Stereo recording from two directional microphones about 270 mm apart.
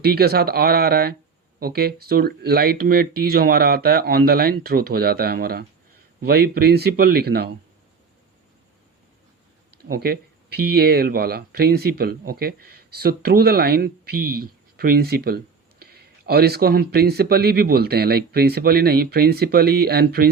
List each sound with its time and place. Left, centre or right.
0.0 s speech: right
9.9 s speech: right